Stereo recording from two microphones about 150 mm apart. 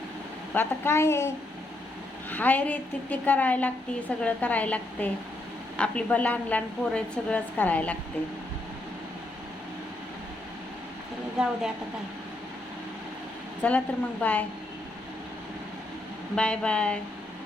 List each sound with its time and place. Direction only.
0.5 s a woman's voice: 15° left (ahead or behind)
2.3 s a woman's voice: 10° left (ahead or behind)
11.4 s a woman's voice: 5° right (ahead or behind)
13.6 s a woman's voice: 10° left (ahead or behind)
16.3 s a woman's voice: 5° left (ahead or behind)